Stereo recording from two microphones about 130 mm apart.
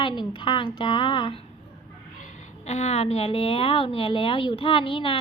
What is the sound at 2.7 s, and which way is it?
A woman's voice, 55° left (ahead or behind).